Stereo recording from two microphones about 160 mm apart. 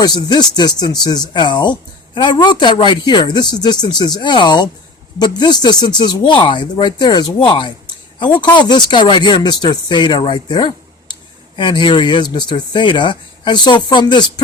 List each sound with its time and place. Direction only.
0.0 s speech: 25° left (ahead or behind)